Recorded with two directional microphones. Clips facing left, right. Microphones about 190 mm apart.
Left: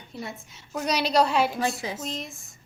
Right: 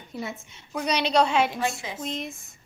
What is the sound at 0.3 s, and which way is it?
A woman's voice, 5° right (ahead or behind).